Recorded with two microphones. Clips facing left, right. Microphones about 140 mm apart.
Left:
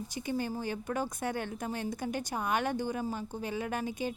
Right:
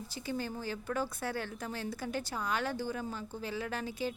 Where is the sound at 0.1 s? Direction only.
15° left (ahead or behind).